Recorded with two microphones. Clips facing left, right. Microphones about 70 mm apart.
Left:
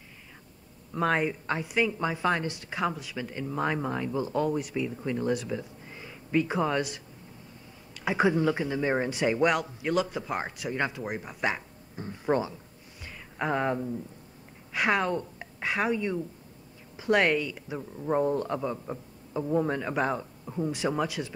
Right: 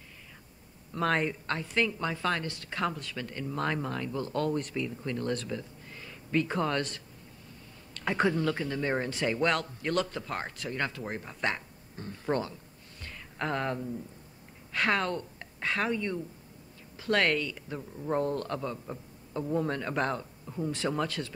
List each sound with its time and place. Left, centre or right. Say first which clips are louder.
0.9 s a woman's voice: left 2 dB; centre
13.0 s a sound: left 3 dB; centre
14.7 s a woman's voice: left 2 dB; centre